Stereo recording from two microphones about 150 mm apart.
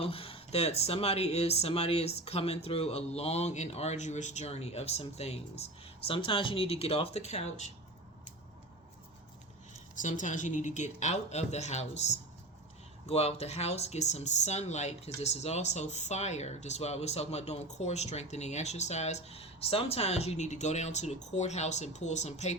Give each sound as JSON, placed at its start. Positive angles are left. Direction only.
{"t": 0.0, "sound": "speech", "side_deg": 40}
{"t": 9.9, "sound": "speech", "side_deg": 55}